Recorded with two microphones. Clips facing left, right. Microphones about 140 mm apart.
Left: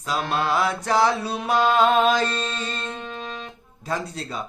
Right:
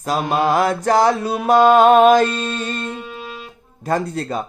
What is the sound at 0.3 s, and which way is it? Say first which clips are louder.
Mantra: right 6 dB; 45° right (ahead or behind).